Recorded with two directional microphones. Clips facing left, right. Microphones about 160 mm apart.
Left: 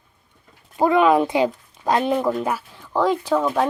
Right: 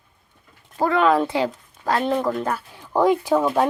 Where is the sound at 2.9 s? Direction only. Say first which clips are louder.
Right 2 dB; 15° right (ahead or behind).